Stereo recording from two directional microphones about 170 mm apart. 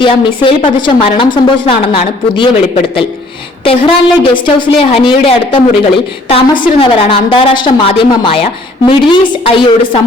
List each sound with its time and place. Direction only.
0.0 s speech: 30° left (ahead or behind)
3.6 s speech: 30° left (ahead or behind)